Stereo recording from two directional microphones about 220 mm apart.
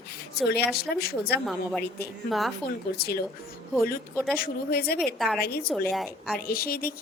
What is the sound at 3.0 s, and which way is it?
Speech, 45° left (ahead or behind).